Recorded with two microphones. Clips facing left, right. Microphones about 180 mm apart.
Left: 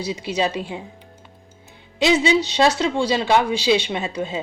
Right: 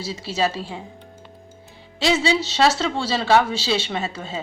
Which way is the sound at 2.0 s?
20° left (ahead or behind).